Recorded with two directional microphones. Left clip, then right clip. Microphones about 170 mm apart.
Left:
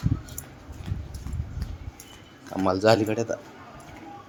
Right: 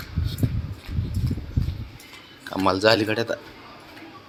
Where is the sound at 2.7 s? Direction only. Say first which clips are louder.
Right 2 dB; 10° left (ahead or behind).